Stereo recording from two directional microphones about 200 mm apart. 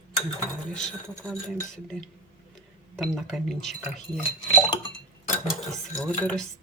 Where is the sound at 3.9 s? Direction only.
25° left (ahead or behind).